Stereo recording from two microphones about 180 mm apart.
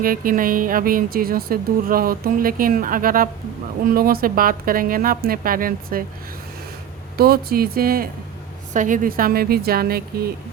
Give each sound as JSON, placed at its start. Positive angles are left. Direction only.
{"t": 0.0, "sound": "speech", "side_deg": -50}
{"t": 7.2, "sound": "a woman's voice", "side_deg": -55}